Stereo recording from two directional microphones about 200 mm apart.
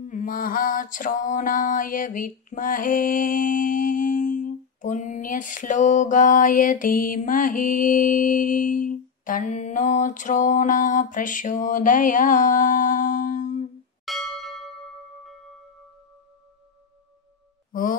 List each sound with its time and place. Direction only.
0.0 s mantra: 40° left (ahead or behind)
14.0 s bell: centre (ahead or behind)